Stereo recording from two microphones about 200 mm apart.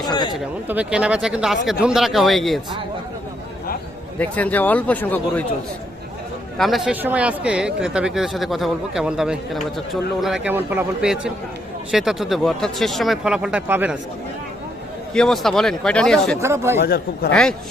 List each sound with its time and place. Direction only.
0.1 s speech: 20° left (ahead or behind)
0.3 s speech: 5° right (ahead or behind)
4.2 s speech: 10° left (ahead or behind)
6.6 s speech: centre (ahead or behind)
15.1 s speech: centre (ahead or behind)
16.4 s speech: 15° right (ahead or behind)
16.8 s a man's voice: 50° left (ahead or behind)